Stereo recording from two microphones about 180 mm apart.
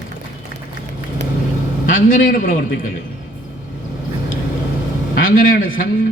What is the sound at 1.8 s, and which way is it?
Speech, 50° left (ahead or behind).